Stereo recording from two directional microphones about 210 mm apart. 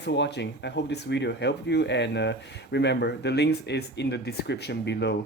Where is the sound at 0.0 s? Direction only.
55° left (ahead or behind).